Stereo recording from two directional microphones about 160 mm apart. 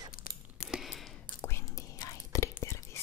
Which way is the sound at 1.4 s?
15° left (ahead or behind).